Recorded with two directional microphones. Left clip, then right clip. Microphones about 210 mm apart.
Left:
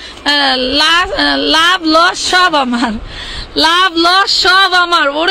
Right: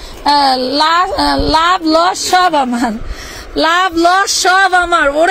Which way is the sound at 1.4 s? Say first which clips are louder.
Left 2 dB; 5° left (ahead or behind).